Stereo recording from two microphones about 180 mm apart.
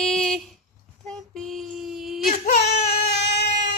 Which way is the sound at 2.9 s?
65° left (ahead or behind).